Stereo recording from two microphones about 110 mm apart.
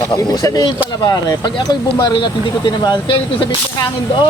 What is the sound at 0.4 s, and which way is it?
Speech, 35° left (ahead or behind).